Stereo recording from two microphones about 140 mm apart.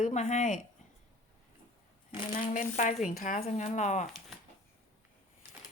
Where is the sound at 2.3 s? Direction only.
70° left (ahead or behind).